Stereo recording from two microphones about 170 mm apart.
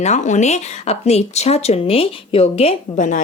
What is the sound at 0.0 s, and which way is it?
Speech, 45° left (ahead or behind).